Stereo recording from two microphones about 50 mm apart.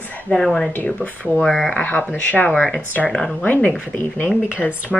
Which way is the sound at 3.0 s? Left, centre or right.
Centre.